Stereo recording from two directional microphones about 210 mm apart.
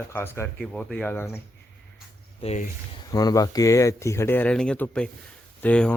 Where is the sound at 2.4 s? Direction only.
30° left (ahead or behind).